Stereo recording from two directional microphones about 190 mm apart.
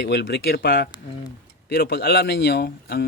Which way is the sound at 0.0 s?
65° left (ahead or behind).